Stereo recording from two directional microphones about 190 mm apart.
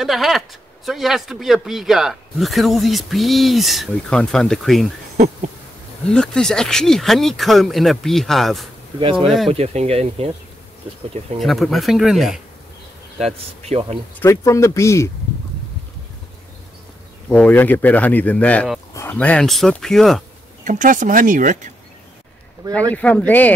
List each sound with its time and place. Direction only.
0.0 s speech: centre (ahead or behind)
6.0 s speech: 5° left (ahead or behind)
9.5 s speech: 35° right (ahead or behind)
11.3 s speech: centre (ahead or behind)
13.2 s speech: 35° right (ahead or behind)
14.2 s speech: 15° left (ahead or behind)
17.3 s speech: 5° left (ahead or behind)
20.6 s speech: 40° right (ahead or behind)
22.7 s speech: 10° left (ahead or behind)